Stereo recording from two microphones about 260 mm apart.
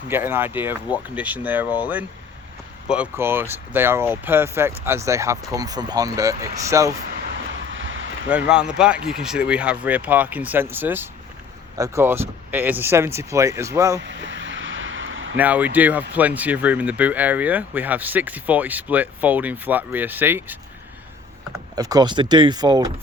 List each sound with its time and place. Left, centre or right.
0.1 s speech: centre
7.5 s vehicle: right
8.3 s speech: centre
14.0 s vehicle: right
15.4 s speech: centre
21.8 s speech: centre